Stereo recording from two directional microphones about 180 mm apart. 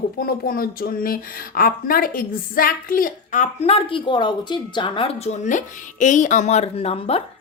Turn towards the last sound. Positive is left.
turn(degrees=35)  # may be behind; listen again after turning